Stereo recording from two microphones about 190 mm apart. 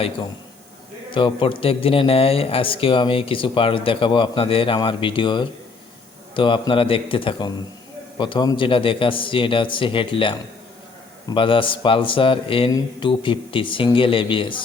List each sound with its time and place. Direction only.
1.1 s speech: 25° left (ahead or behind)